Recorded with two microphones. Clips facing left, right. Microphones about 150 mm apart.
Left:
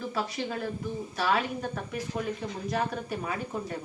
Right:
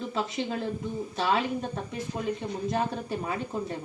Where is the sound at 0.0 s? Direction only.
20° right (ahead or behind).